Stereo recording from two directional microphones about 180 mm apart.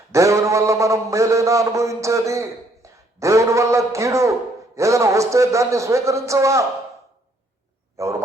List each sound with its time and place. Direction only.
0.1 s a sound: 15° right (ahead or behind)
4.8 s a man's voice: 15° right (ahead or behind)
8.0 s a man's voice: 15° right (ahead or behind)